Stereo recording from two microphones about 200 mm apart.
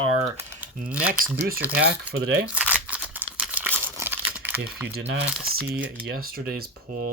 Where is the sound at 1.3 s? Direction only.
45° right (ahead or behind).